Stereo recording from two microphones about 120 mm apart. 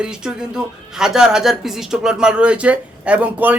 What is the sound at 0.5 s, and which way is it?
Speech, 5° right (ahead or behind).